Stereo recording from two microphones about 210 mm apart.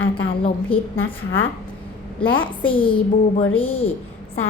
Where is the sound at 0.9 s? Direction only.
70° left (ahead or behind).